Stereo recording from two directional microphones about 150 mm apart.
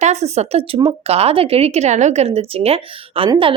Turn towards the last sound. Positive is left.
turn(degrees=-35)  # may be behind; listen again after turning